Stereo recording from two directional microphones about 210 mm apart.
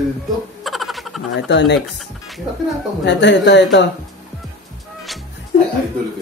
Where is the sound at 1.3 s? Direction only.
55° left (ahead or behind).